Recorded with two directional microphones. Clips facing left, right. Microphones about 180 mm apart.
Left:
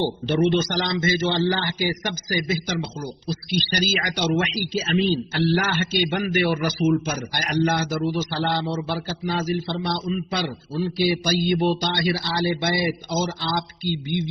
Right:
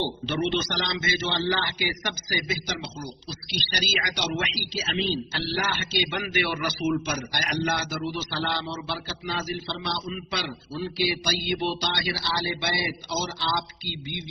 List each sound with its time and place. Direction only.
0.0 s a man's voice: 40° left (ahead or behind)
7.0 s a man's voice: 45° left (ahead or behind)